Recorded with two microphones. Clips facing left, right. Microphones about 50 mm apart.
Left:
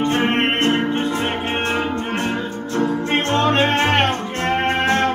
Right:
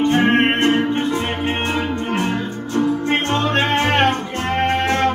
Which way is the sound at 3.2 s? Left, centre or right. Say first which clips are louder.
Left 2 dB; left.